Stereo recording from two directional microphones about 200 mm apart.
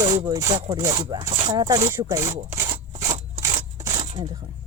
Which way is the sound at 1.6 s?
15° right (ahead or behind).